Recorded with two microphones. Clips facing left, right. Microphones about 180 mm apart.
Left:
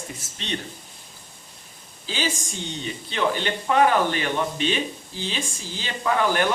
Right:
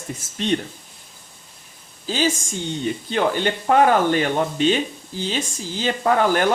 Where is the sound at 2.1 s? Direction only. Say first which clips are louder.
Right 6 dB; 45° right (ahead or behind).